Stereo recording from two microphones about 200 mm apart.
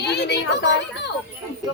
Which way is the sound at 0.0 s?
55° left (ahead or behind).